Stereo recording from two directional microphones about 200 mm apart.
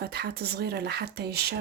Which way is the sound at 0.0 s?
55° right (ahead or behind).